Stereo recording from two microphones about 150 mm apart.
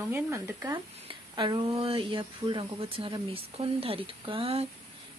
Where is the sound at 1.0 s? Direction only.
30° right (ahead or behind).